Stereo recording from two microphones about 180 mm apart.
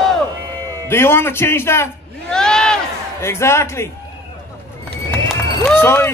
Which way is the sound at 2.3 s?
5° left (ahead or behind).